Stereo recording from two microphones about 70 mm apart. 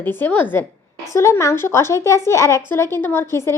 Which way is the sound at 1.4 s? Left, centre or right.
Left.